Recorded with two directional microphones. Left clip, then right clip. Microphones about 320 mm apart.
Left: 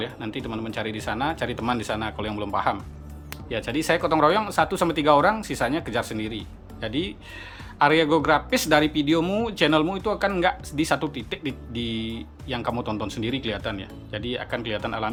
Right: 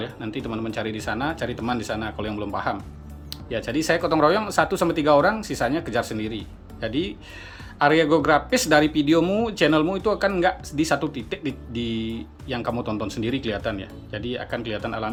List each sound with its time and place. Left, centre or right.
0.0 s speech: centre